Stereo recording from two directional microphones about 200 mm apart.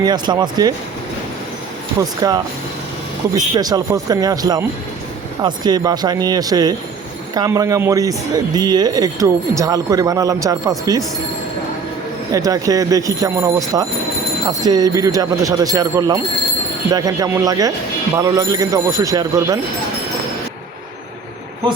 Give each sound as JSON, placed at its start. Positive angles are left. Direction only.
{"t": 0.0, "sound": "speech", "side_deg": -20}
{"t": 2.0, "sound": "speech", "side_deg": -20}
{"t": 12.3, "sound": "speech", "side_deg": -15}